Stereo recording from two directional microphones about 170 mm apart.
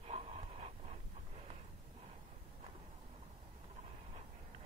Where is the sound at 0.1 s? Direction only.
35° right (ahead or behind).